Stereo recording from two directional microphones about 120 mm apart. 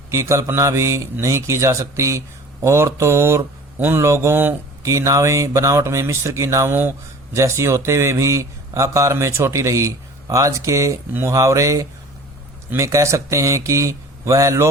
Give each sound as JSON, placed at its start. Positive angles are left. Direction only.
{"t": 0.1, "sound": "a man's voice", "side_deg": -25}